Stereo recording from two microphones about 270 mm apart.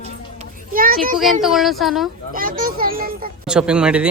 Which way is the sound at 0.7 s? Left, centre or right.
Right.